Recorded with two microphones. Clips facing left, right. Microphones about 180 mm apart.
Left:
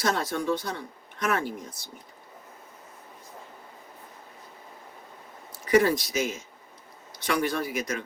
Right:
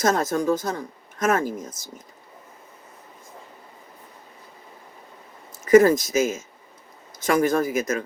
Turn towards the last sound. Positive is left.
turn(degrees=-45)  # may be behind; listen again after turning